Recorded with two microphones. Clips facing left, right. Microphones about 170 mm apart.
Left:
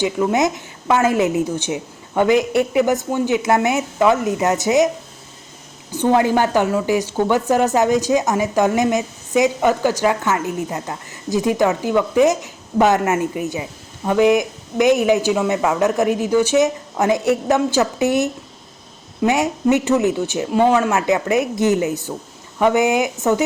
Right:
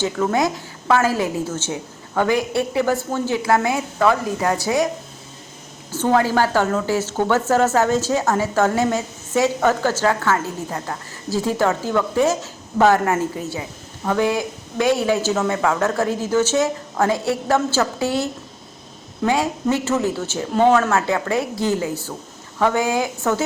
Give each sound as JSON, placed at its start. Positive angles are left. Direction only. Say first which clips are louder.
{"t": 0.0, "sound": "a woman's voice", "louder": "left 2 dB", "side_deg": 15}
{"t": 5.9, "sound": "a woman's voice", "louder": "left 2 dB", "side_deg": 15}